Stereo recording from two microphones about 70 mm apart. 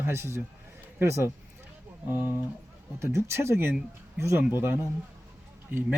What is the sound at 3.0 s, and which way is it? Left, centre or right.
Speech, right.